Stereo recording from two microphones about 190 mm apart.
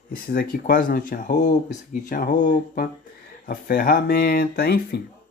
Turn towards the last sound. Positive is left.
turn(degrees=55)  # may be behind; listen again after turning